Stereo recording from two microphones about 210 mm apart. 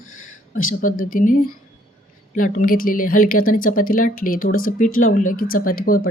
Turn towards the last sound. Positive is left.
turn(degrees=45)  # may be behind; listen again after turning